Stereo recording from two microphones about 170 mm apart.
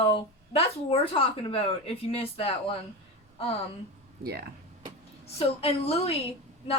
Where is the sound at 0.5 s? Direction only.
35° left (ahead or behind).